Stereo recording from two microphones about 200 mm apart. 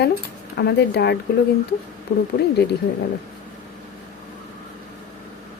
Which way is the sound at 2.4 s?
55° left (ahead or behind).